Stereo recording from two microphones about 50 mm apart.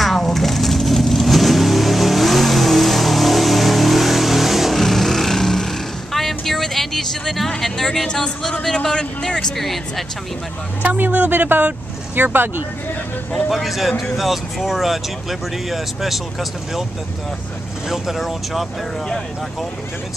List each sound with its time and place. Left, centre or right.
0.0 s vehicle: centre
9.6 s speech: centre
10.8 s speech: right
13.5 s speech: centre
17.8 s speech: centre